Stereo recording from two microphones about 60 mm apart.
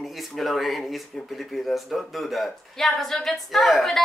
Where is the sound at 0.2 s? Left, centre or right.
Centre.